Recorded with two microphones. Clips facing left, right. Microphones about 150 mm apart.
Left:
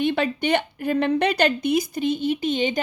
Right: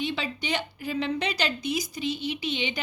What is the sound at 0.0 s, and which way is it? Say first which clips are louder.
A woman's voice: left 9 dB; 55° left (ahead or behind).